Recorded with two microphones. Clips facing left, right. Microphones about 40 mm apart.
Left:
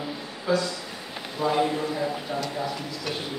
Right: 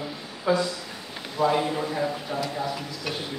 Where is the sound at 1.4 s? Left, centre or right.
Centre.